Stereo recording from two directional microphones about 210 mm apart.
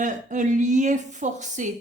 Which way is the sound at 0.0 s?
35° right (ahead or behind).